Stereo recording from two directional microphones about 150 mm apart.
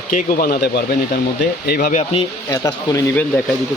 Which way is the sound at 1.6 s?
90° left.